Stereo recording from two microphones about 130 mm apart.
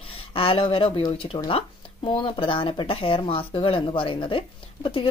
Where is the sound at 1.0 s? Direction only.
45° left (ahead or behind).